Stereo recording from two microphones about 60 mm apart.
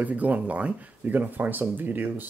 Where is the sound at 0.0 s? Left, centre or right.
Right.